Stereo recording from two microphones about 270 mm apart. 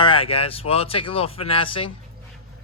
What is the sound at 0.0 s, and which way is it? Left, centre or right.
Speech, centre.